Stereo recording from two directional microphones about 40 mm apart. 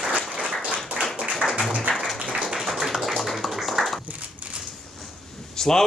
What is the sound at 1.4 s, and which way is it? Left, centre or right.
Music, left.